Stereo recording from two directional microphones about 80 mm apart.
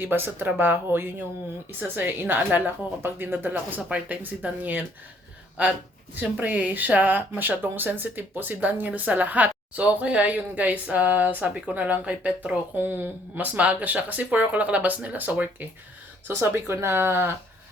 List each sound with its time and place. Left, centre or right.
0.0 s speech: right
12.7 s speech: right
16.2 s speech: right